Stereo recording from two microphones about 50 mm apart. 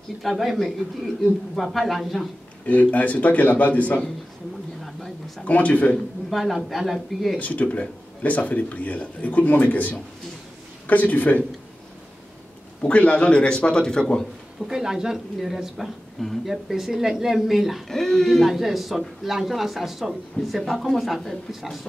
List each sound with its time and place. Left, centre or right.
0.2 s speech: centre
1.2 s speech: centre
2.6 s a man's voice: left
5.4 s speech: left
6.3 s speech: centre
7.3 s a man's voice: left
12.8 s speech: left
14.7 s a man's voice: centre
17.8 s speech: centre
18.5 s speech: centre